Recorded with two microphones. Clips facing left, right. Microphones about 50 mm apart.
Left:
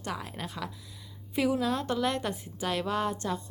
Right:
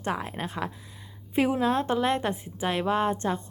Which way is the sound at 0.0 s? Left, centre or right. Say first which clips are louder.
Right 6 dB; right.